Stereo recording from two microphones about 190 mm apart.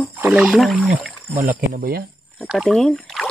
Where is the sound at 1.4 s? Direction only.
50° right (ahead or behind).